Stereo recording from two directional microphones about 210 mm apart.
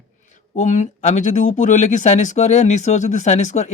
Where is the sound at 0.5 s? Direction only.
35° left (ahead or behind).